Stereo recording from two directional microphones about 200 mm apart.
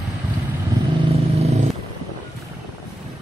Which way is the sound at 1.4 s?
35° right (ahead or behind).